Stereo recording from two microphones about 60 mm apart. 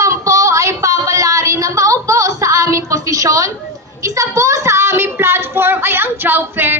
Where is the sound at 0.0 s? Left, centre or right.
Right.